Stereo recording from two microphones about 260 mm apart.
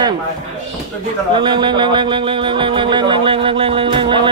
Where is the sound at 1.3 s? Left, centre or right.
Centre.